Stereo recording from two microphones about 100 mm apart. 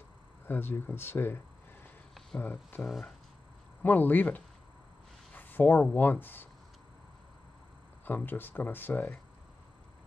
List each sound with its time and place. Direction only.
0.5 s speech: 20° left (ahead or behind)
8.0 s speech: 20° left (ahead or behind)